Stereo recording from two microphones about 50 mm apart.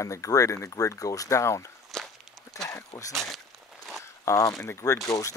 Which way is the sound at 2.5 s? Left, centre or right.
Left.